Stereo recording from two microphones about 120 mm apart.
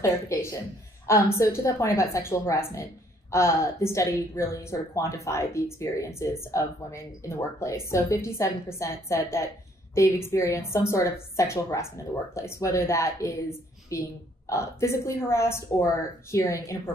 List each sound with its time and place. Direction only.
0.0 s a woman's voice: 25° left (ahead or behind)